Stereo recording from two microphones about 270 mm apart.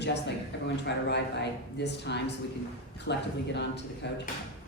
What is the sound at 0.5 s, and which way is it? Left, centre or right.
Speech, left.